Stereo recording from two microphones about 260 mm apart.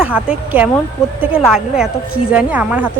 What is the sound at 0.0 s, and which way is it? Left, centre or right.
A woman's voice, centre.